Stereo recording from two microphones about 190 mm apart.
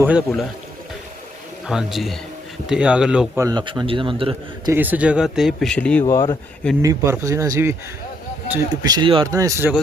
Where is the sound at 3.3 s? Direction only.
20° right (ahead or behind).